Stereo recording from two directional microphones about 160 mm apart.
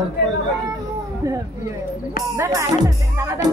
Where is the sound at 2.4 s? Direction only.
20° right (ahead or behind).